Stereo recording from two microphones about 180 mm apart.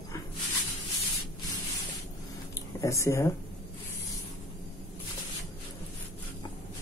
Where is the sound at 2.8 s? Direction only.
15° left (ahead or behind).